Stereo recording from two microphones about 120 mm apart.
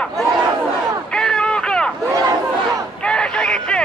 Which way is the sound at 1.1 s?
5° left (ahead or behind).